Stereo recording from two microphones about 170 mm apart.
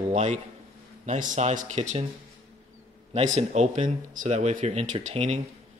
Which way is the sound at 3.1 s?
40° right (ahead or behind).